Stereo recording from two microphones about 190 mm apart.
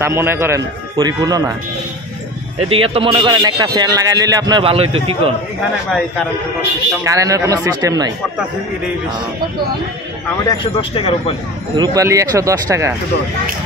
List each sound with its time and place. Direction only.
0.0 s speech: 10° right (ahead or behind)
2.7 s speech: 30° right (ahead or behind)
5.9 s a man's voice: centre (ahead or behind)
7.1 s speech: 15° right (ahead or behind)
10.2 s a man's voice: 20° left (ahead or behind)
11.7 s speech: 20° right (ahead or behind)